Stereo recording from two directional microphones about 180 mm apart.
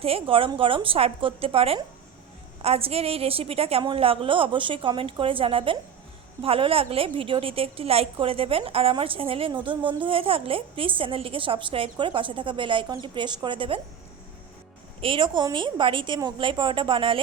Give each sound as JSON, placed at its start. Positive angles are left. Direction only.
{"t": 0.0, "sound": "a woman's voice", "side_deg": -30}
{"t": 15.0, "sound": "a woman's voice", "side_deg": -25}